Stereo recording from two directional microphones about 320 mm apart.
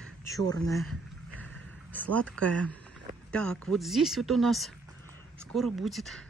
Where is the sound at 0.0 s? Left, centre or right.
Centre.